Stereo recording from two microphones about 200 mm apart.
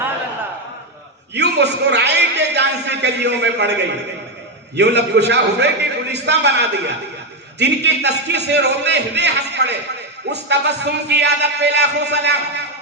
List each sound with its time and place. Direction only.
1.3 s a man's voice: 60° right (ahead or behind)